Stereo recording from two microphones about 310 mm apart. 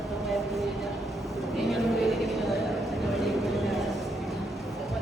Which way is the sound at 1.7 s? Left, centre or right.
Centre.